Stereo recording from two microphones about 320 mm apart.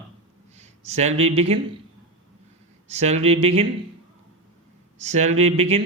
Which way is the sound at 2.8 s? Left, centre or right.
Right.